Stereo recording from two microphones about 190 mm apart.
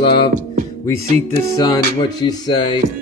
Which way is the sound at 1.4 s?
20° left (ahead or behind).